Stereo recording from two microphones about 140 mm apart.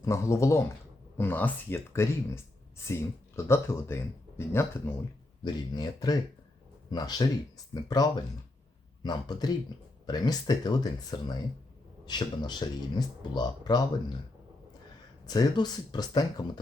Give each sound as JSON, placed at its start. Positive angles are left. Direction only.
{"t": 0.0, "sound": "speech", "side_deg": 20}
{"t": 5.4, "sound": "speech", "side_deg": 30}
{"t": 15.3, "sound": "speech", "side_deg": 30}